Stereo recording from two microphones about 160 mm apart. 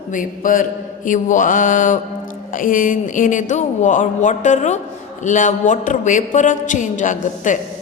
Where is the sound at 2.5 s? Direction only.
60° left (ahead or behind).